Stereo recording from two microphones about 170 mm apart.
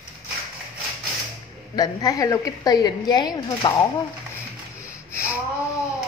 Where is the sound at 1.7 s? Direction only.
20° left (ahead or behind).